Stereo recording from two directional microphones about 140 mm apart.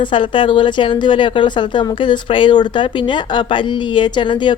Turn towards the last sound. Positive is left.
turn(degrees=35)  # may be behind; listen again after turning